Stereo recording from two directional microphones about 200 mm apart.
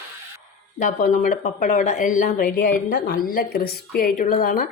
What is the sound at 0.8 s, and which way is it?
Speech, 40° left (ahead or behind).